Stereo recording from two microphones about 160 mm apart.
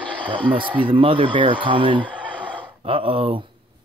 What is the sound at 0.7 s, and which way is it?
Speech, 30° right (ahead or behind).